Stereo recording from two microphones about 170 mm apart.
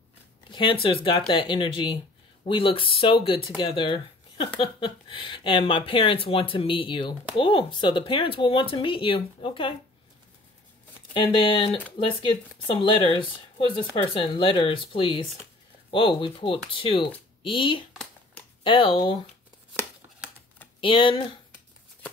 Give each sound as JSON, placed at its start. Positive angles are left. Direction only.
{"t": 0.5, "sound": "a sound", "side_deg": 30}
{"t": 0.8, "sound": "speech", "side_deg": 30}
{"t": 11.1, "sound": "speech", "side_deg": 30}
{"t": 20.8, "sound": "speech", "side_deg": 30}